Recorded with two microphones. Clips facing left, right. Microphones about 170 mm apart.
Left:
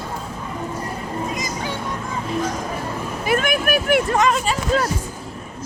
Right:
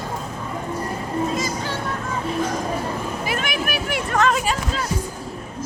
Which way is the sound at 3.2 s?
50° left (ahead or behind).